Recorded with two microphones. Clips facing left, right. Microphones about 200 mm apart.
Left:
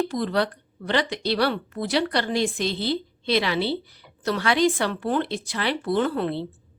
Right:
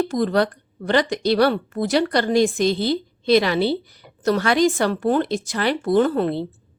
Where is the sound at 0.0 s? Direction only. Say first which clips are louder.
Right 4 dB; 45° right (ahead or behind).